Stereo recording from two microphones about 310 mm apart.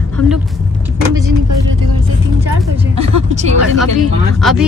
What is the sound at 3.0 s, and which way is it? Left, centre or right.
Vehicle, right.